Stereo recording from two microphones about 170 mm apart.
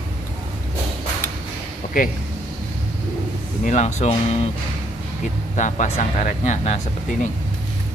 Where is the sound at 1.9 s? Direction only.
50° left (ahead or behind).